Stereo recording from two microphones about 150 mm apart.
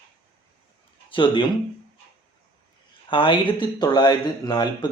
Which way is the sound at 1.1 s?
35° left (ahead or behind).